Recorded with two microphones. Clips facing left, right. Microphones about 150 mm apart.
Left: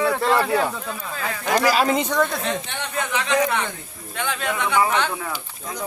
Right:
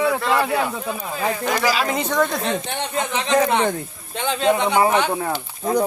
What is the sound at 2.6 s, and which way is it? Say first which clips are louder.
Speech: right 4 dB; 30° right (ahead or behind).